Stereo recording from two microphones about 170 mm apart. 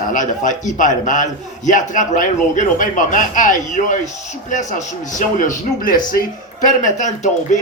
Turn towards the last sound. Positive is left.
turn(degrees=45)  # may be behind; listen again after turning